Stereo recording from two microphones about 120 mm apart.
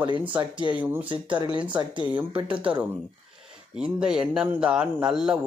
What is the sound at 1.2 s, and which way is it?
Speech, 40° right (ahead or behind).